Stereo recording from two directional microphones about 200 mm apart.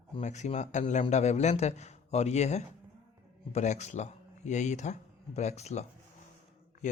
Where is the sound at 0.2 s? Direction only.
35° left (ahead or behind).